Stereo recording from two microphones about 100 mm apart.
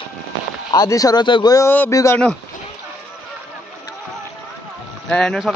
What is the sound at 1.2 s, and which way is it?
Speech, 55° left (ahead or behind).